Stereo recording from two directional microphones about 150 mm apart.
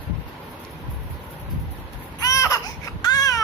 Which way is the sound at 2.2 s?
20° left (ahead or behind).